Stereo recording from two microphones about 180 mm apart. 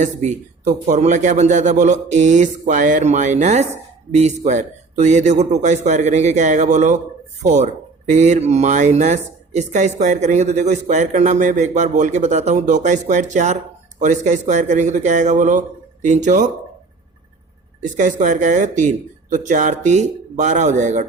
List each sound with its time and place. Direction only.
0.0 s speech: 40° right (ahead or behind)
17.8 s speech: 45° right (ahead or behind)